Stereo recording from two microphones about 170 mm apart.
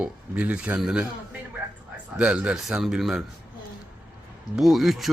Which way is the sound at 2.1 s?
5° right (ahead or behind).